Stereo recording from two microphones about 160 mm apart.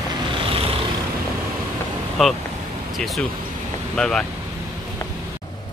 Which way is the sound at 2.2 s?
Centre (ahead or behind).